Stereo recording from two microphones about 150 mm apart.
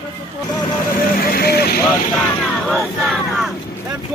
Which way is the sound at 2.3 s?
5° left (ahead or behind).